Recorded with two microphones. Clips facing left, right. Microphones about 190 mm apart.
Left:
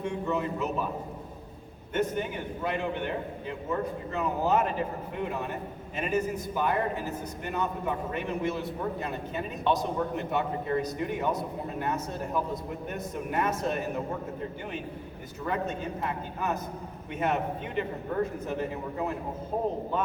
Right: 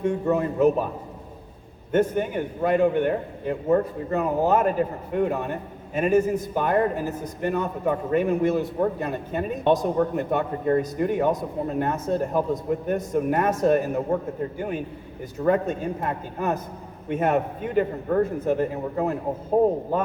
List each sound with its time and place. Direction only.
0.0 s a man's voice: 50° right (ahead or behind)
1.9 s a man's voice: 50° right (ahead or behind)
15.4 s a man's voice: 50° right (ahead or behind)